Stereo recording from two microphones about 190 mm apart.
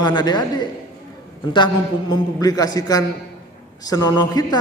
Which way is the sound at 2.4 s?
20° left (ahead or behind).